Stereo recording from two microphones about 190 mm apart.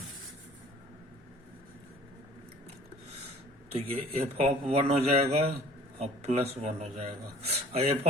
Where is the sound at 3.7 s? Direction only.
30° right (ahead or behind).